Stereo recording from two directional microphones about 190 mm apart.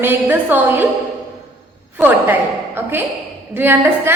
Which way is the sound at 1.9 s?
10° right (ahead or behind).